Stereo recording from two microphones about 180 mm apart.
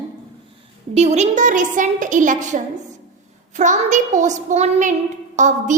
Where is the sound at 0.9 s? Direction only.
35° right (ahead or behind).